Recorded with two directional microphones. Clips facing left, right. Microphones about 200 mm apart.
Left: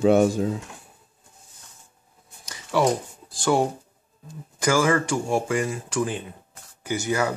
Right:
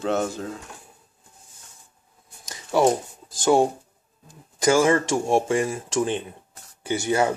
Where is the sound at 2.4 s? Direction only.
25° right (ahead or behind).